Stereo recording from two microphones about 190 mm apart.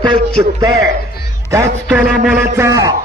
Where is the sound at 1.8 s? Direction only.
5° right (ahead or behind).